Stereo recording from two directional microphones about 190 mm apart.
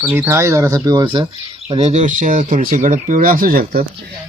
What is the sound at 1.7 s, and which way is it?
Speech, 35° right (ahead or behind).